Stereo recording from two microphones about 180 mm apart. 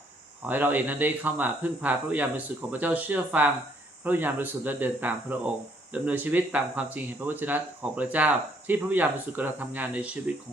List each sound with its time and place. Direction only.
0.4 s speech: 10° right (ahead or behind)